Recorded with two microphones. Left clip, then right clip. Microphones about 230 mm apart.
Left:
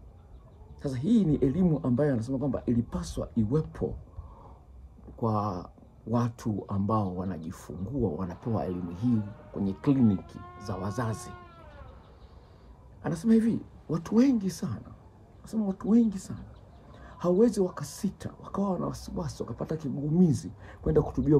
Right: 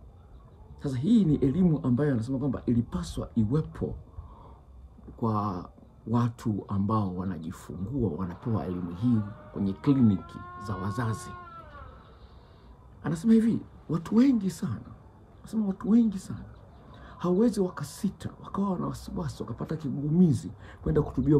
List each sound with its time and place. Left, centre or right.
0.8 s speech: centre
5.2 s a man's voice: centre
13.0 s speech: centre